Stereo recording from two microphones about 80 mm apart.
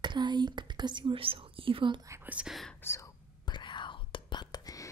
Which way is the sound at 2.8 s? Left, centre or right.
Left.